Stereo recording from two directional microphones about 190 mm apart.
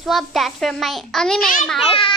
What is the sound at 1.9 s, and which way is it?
Speech, 30° left (ahead or behind).